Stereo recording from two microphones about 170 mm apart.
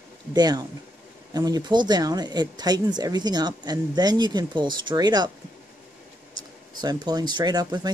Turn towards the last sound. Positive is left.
turn(degrees=-25)  # may be behind; listen again after turning